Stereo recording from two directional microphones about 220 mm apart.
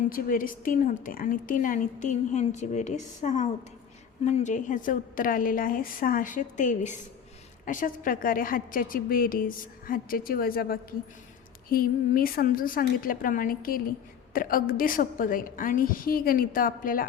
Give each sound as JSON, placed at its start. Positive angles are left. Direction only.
{"t": 0.1, "sound": "a woman's voice", "side_deg": 40}